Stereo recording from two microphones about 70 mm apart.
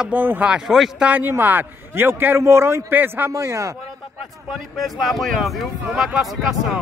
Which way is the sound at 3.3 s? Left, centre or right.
Right.